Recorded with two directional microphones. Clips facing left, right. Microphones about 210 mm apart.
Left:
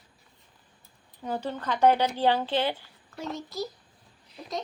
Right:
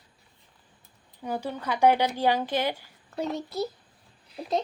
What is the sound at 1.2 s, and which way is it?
A woman's voice, 10° right (ahead or behind).